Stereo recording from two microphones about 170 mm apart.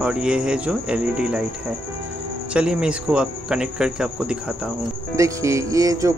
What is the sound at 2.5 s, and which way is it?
Speech, 5° right (ahead or behind).